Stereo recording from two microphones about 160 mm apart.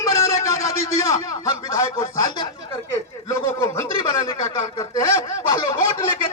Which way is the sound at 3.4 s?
15° left (ahead or behind).